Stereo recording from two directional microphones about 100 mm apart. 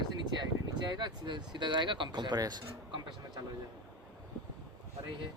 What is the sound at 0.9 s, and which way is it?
Speech, 45° right (ahead or behind).